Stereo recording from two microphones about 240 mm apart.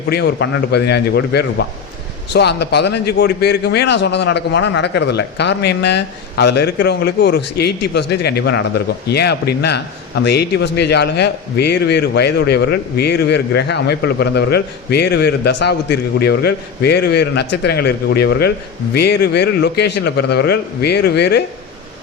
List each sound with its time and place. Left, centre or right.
0.1 s a man's voice: left